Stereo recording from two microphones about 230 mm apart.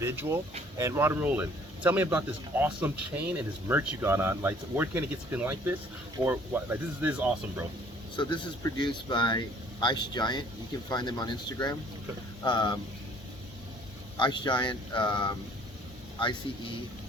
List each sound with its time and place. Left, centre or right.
0.0 s speech: centre
8.1 s speech: centre
14.2 s speech: centre